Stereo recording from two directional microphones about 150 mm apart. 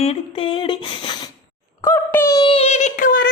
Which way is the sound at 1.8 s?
15° left (ahead or behind).